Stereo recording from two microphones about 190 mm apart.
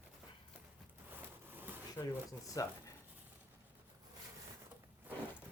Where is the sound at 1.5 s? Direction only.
10° right (ahead or behind).